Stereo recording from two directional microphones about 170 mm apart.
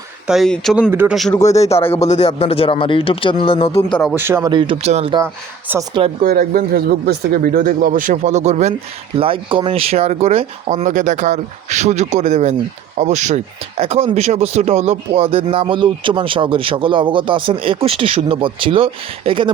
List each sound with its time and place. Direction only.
0.3 s speech: centre (ahead or behind)
0.9 s speech: 10° right (ahead or behind)
1.3 s speech: 20° left (ahead or behind)
1.7 s speech: 35° left (ahead or behind)
4.1 s speech: 15° right (ahead or behind)
4.5 s speech: 30° right (ahead or behind)
5.1 s speech: 15° right (ahead or behind)
6.2 s speech: 55° right (ahead or behind)
9.1 s speech: 30° right (ahead or behind)